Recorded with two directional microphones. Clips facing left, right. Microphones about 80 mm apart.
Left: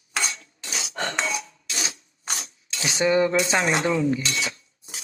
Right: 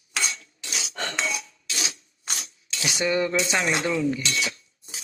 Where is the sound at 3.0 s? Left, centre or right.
Left.